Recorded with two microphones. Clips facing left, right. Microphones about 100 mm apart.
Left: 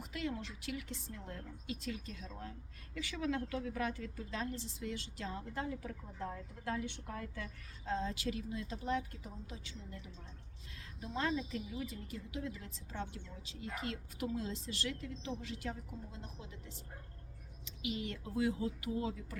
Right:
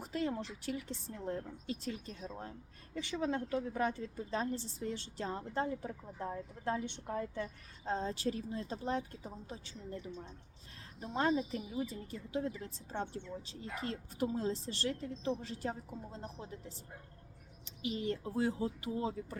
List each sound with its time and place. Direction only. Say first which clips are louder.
0.0 s a woman's voice: right 4 dB; 35° right (ahead or behind)
5.9 s a woman's voice: right 2 dB; 25° right (ahead or behind)
11.0 s a woman's voice: right 4 dB; 30° right (ahead or behind)